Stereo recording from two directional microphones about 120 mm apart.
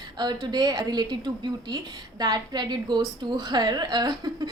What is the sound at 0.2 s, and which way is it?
A woman's voice, 35° right (ahead or behind).